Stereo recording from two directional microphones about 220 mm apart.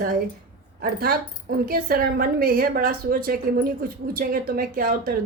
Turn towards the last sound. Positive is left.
turn(degrees=-40)  # may be behind; listen again after turning